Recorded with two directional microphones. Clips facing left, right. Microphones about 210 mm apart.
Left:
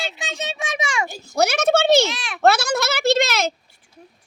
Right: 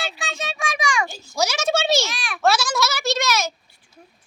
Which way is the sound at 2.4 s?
60° left (ahead or behind).